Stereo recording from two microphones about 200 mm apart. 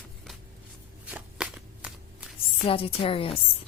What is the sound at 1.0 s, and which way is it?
Shuffling cards, 5° right (ahead or behind).